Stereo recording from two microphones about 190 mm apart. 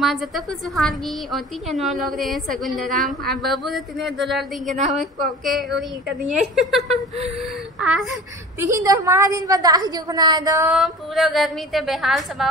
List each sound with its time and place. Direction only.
0.0 s a woman's voice: centre (ahead or behind)
8.5 s a woman's voice: 15° right (ahead or behind)
10.7 s a woman's voice: centre (ahead or behind)